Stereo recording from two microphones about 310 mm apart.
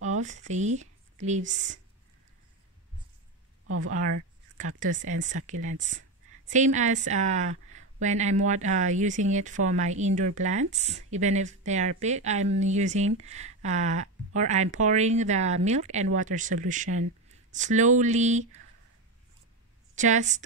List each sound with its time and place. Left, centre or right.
0.0 s speech: right
3.6 s speech: right
4.6 s a woman's voice: right
20.0 s a woman's voice: right